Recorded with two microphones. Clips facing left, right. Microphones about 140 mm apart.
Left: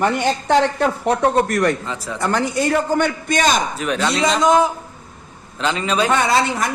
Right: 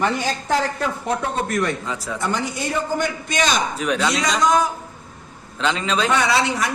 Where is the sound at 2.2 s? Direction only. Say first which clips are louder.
Left 6 dB; 80° left; by 3.6 s 50° left (ahead or behind).